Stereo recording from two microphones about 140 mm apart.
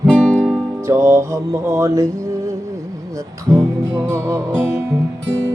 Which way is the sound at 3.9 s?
20° right (ahead or behind).